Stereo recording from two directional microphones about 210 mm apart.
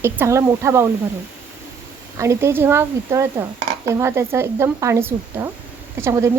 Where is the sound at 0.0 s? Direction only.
10° right (ahead or behind).